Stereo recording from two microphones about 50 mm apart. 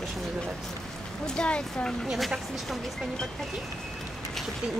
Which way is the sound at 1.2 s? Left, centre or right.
Centre.